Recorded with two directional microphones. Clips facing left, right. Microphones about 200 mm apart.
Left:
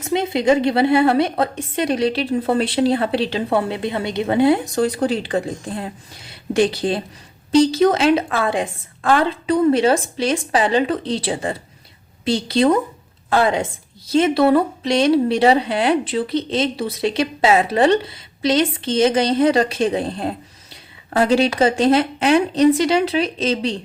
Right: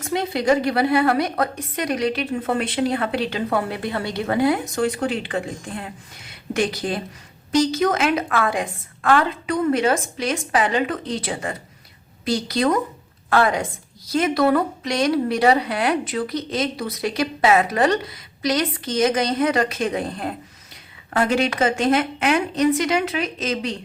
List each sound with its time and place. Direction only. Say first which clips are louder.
0.0 s a woman's voice: left 4 dB; 20° left (ahead or behind)